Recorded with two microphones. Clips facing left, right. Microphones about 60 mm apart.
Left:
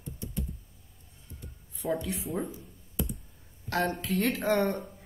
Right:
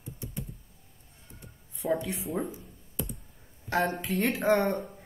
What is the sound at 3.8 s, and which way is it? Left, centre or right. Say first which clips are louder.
A woman's voice: left 2 dB; centre.